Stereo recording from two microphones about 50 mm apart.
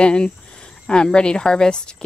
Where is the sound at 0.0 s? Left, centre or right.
Centre.